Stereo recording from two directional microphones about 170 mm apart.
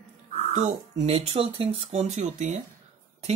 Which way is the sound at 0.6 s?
40° right (ahead or behind).